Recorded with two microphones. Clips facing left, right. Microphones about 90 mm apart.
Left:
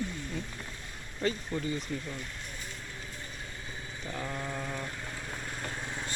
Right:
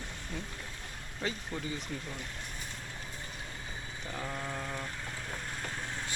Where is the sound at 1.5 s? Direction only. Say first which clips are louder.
Left 5 dB; 5° right (ahead or behind).